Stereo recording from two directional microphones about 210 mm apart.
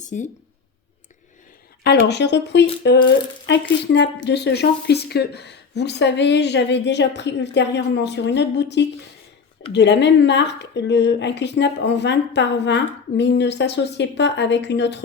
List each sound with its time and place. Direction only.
0.0 s speech: 35° left (ahead or behind)
1.8 s speech: 50° left (ahead or behind)